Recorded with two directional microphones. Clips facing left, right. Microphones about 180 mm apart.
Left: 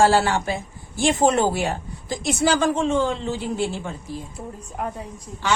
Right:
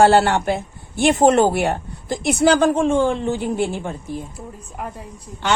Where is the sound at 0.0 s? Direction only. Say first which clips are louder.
Right 4 dB; 65° right (ahead or behind).